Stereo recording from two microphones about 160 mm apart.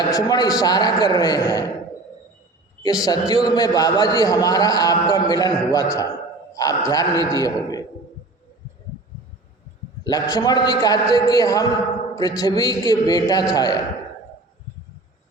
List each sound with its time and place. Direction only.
0.1 s a man's voice: 25° left (ahead or behind)
2.8 s a man's voice: 25° left (ahead or behind)
10.0 s a man's voice: 25° left (ahead or behind)